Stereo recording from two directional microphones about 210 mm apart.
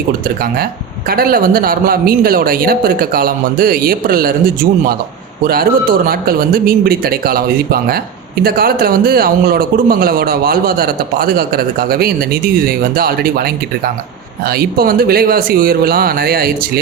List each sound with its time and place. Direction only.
0.4 s a man's voice: 45° right (ahead or behind)